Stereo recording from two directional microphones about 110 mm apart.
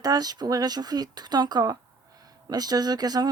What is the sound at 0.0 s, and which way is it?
Speech, 35° right (ahead or behind).